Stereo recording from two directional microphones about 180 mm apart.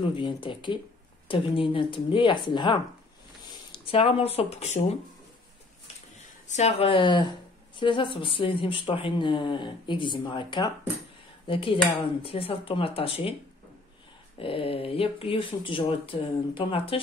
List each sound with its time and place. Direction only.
0.0 s speech: 30° left (ahead or behind)
6.4 s speech: 40° left (ahead or behind)
14.4 s speech: 30° left (ahead or behind)